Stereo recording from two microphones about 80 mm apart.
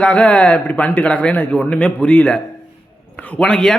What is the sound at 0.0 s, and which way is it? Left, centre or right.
A man's voice, centre.